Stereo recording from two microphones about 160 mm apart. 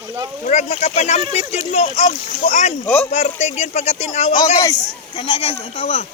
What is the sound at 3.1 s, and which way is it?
Speech, 45° left (ahead or behind).